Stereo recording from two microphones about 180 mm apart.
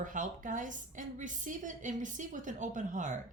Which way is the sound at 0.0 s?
45° right (ahead or behind).